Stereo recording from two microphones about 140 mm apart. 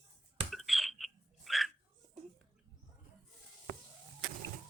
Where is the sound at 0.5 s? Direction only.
Centre (ahead or behind).